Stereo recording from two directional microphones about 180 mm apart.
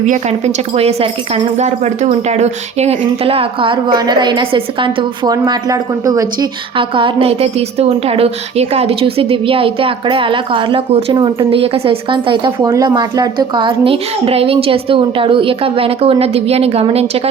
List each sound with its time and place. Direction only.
0.0 s a woman's voice: 40° right (ahead or behind)